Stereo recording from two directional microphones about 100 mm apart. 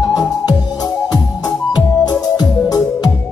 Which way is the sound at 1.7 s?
40° left (ahead or behind).